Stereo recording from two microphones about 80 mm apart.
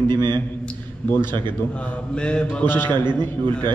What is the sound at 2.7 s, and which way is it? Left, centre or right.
Speech, left.